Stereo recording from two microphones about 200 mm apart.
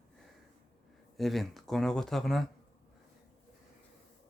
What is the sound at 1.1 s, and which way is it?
Speech, centre (ahead or behind).